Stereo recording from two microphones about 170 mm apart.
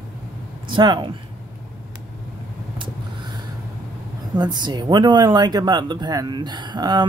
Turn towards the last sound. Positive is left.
turn(degrees=-25)  # may be behind; listen again after turning